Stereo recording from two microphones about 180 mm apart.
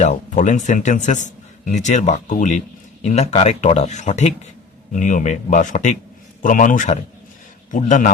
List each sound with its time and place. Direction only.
0.0 s a man's voice: 45° left (ahead or behind)